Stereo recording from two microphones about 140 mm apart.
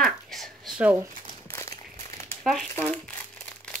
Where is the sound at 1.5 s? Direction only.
20° left (ahead or behind).